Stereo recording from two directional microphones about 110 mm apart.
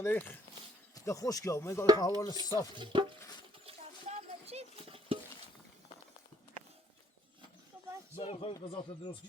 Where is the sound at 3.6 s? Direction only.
70° right (ahead or behind).